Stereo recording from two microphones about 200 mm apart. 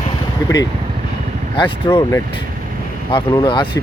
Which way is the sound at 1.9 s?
15° left (ahead or behind).